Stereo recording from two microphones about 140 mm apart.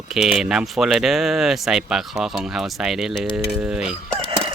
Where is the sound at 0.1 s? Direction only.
5° right (ahead or behind).